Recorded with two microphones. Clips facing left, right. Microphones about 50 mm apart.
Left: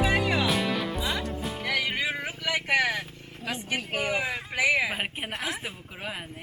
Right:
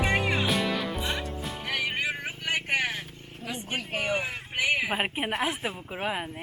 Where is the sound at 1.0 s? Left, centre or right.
Left.